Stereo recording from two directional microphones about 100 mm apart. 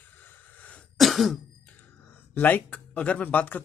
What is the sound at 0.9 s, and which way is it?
Throat clearing, centre (ahead or behind).